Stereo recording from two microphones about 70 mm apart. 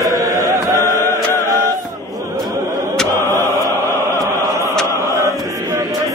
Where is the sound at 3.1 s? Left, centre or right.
Left.